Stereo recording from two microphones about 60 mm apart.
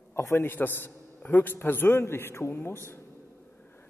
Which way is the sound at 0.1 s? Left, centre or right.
Left.